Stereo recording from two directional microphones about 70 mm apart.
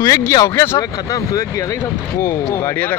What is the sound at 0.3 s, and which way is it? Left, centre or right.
Speech, left.